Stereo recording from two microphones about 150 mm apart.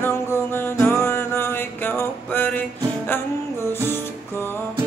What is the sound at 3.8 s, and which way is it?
Music, 15° left (ahead or behind).